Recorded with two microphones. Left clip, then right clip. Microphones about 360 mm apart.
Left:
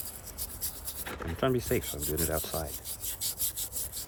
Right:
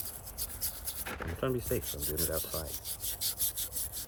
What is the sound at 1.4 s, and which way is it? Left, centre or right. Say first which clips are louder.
Rub: left 5 dB; centre.